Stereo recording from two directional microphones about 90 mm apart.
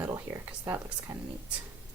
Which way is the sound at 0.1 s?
35° right (ahead or behind).